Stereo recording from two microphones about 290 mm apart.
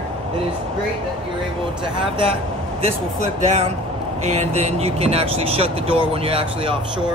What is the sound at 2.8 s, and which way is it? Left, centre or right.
Speech, right.